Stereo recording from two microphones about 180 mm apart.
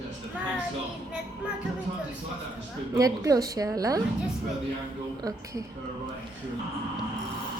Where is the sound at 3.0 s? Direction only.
20° right (ahead or behind).